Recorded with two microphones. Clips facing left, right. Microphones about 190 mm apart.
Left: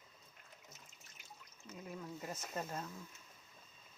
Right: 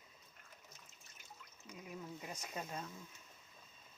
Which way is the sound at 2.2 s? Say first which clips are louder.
Left 3 dB; centre (ahead or behind).